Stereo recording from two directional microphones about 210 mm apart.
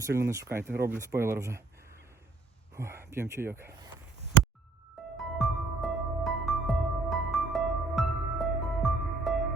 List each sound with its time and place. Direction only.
0.0 s speech: 15° right (ahead or behind)
2.7 s speech: 15° right (ahead or behind)
5.1 s music: centre (ahead or behind)